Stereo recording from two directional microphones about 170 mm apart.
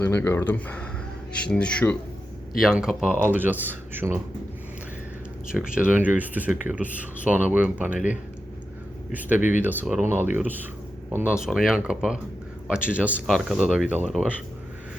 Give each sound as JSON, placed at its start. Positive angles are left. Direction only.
{"t": 0.0, "sound": "speech", "side_deg": 15}
{"t": 2.6, "sound": "speech", "side_deg": -5}
{"t": 5.5, "sound": "speech", "side_deg": -5}
{"t": 7.9, "sound": "speech", "side_deg": 50}
{"t": 9.6, "sound": "speech", "side_deg": -10}